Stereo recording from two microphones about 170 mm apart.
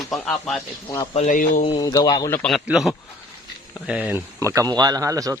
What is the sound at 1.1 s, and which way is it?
Speech, 50° left (ahead or behind).